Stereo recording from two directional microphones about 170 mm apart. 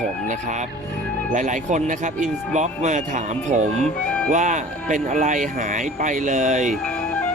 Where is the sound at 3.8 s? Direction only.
5° left (ahead or behind).